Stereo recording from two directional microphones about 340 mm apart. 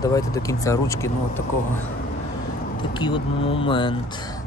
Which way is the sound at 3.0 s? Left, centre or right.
Centre.